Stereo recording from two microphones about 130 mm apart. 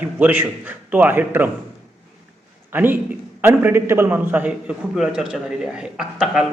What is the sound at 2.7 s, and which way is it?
A man's voice, 15° right (ahead or behind).